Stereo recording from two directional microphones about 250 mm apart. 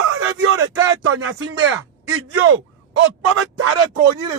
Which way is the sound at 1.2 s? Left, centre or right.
Right.